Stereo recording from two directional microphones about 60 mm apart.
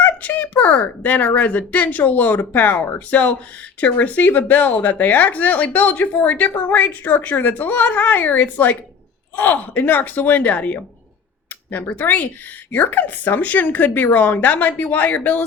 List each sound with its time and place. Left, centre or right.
0.0 s speech: left